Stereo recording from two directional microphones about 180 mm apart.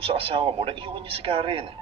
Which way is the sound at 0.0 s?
30° right (ahead or behind).